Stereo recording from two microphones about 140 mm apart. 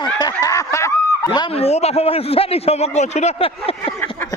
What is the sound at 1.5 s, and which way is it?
A man's voice, 50° left (ahead or behind).